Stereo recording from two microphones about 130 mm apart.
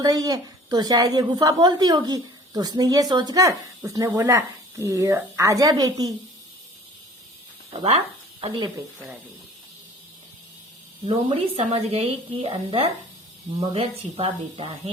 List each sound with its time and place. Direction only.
0.0 s a woman's voice: 30° right (ahead or behind)
7.7 s speech: 45° right (ahead or behind)
11.1 s a woman's voice: 50° right (ahead or behind)